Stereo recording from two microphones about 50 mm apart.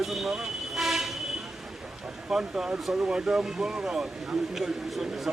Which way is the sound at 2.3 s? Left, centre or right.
Centre.